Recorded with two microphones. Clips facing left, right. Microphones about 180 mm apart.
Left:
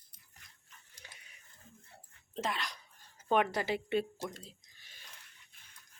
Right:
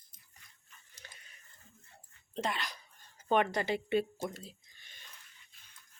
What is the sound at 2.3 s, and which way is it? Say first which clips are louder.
Speech: right 1 dB; centre (ahead or behind).